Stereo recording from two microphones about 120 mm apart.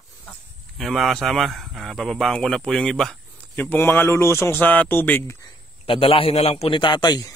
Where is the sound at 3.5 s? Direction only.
15° left (ahead or behind).